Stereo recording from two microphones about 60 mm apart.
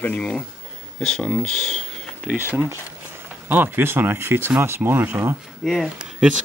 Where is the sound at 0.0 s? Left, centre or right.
Left.